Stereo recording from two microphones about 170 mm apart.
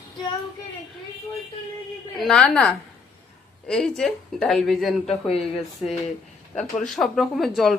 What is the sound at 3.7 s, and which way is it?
Speech, 5° left (ahead or behind).